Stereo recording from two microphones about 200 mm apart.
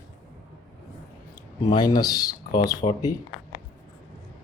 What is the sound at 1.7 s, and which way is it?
Speech, 20° left (ahead or behind).